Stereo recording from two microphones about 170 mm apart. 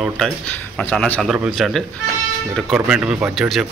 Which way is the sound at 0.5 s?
10° left (ahead or behind).